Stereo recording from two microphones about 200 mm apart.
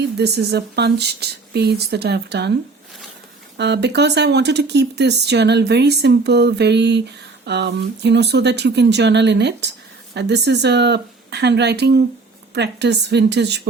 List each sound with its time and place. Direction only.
0.2 s speech: 55° right (ahead or behind)
3.6 s speech: 60° right (ahead or behind)